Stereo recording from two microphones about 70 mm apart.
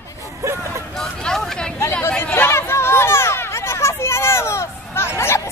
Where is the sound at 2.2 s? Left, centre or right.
Left.